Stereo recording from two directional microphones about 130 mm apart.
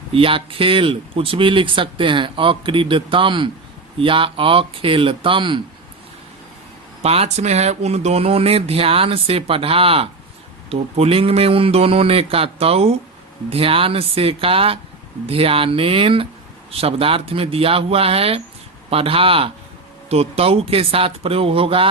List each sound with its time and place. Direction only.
0.1 s speech: 45° right (ahead or behind)
7.0 s speech: 50° right (ahead or behind)